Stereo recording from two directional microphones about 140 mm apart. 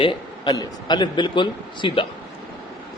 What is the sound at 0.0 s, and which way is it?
A man's voice, 35° left (ahead or behind).